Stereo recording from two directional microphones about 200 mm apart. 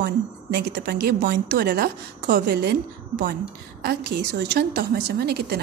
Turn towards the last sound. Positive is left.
turn(degrees=-50)  # may be behind; listen again after turning